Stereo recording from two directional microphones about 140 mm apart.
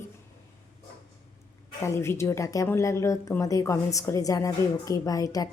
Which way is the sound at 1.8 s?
20° left (ahead or behind).